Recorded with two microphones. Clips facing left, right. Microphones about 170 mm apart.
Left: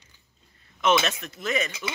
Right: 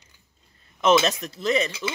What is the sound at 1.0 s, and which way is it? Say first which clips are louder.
Speech: right 5 dB; 35° right (ahead or behind).